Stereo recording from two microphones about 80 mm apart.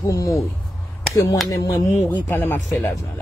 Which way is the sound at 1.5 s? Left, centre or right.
Left.